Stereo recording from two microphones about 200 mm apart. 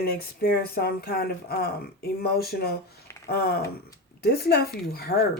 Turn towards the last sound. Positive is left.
turn(degrees=50)  # may be behind; listen again after turning